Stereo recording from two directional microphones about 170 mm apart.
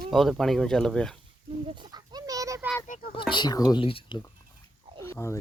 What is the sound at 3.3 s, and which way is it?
Speech, 25° left (ahead or behind).